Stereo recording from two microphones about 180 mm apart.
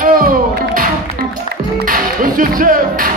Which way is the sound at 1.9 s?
50° right (ahead or behind).